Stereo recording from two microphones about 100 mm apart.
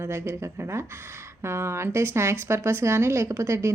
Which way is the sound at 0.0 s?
25° right (ahead or behind).